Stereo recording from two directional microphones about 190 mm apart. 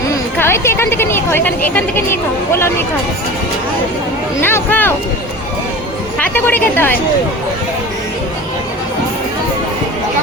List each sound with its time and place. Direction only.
0.3 s a woman's voice: 15° left (ahead or behind)
4.4 s a woman's voice: 10° left (ahead or behind)
6.1 s a woman's voice: 10° left (ahead or behind)